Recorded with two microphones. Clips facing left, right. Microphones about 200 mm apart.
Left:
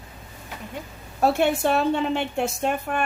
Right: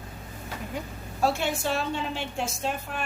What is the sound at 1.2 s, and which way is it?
A woman's voice, 60° left (ahead or behind).